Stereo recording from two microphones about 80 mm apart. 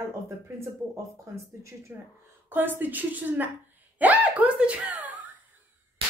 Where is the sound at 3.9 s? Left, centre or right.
Centre.